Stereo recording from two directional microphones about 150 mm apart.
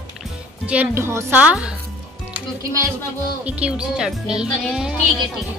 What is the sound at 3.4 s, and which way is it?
A woman's voice, 10° right (ahead or behind).